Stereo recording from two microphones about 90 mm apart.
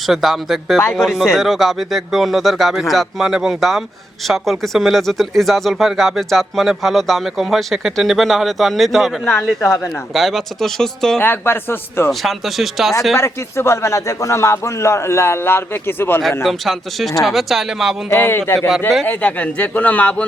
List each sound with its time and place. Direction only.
0.1 s speech: centre (ahead or behind)
9.6 s a man's voice: 30° left (ahead or behind)
10.2 s speech: centre (ahead or behind)
11.2 s a man's voice: 25° left (ahead or behind)
12.2 s speech: centre (ahead or behind)
13.1 s a man's voice: 30° left (ahead or behind)
16.4 s speech: centre (ahead or behind)
18.1 s a man's voice: 25° left (ahead or behind)